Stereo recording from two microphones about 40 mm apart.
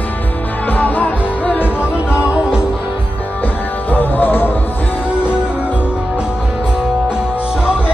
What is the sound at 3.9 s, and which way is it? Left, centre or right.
Music, left.